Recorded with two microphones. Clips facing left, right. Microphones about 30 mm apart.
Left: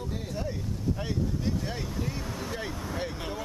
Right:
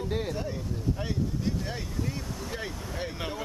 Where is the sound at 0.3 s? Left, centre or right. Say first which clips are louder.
Right 1 dB; centre.